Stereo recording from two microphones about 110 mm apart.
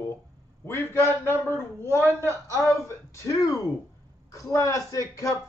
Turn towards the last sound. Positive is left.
turn(degrees=30)  # may be behind; listen again after turning